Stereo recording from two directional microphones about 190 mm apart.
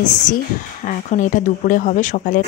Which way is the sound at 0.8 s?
40° left (ahead or behind).